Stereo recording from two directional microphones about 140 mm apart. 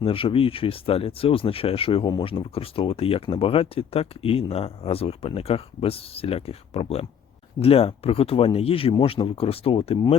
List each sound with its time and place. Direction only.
0.0 s speech: 40° left (ahead or behind)